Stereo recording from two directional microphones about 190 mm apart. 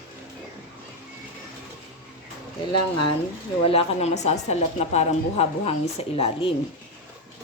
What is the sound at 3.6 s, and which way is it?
A woman's voice, 30° left (ahead or behind).